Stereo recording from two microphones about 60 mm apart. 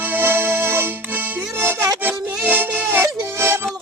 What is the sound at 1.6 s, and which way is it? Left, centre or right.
Music, right.